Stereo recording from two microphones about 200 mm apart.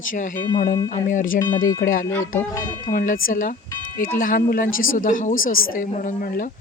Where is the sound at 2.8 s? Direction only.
40° left (ahead or behind).